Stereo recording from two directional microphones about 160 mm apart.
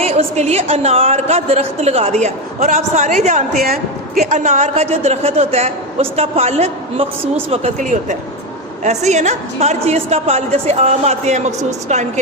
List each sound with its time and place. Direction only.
0.0 s a woman's voice: 40° right (ahead or behind)
3.6 s speech: 65° right (ahead or behind)
4.3 s a man's voice: 50° right (ahead or behind)
7.8 s a woman's voice: 55° right (ahead or behind)